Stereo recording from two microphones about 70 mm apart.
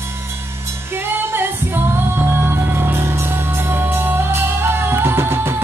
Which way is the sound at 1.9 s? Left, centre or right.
Right.